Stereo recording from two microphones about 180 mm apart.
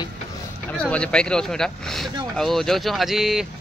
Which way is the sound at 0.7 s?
5° left (ahead or behind).